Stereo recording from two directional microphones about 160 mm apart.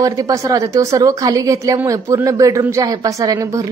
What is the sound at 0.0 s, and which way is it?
A woman's voice, 20° right (ahead or behind).